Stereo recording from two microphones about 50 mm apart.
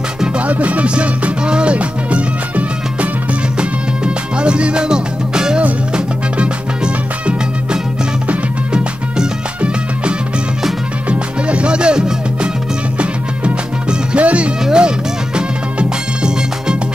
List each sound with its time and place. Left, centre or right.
0.4 s music: right
13.8 s music: right